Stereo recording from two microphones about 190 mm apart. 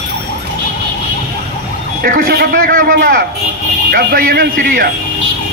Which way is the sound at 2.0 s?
50° right (ahead or behind).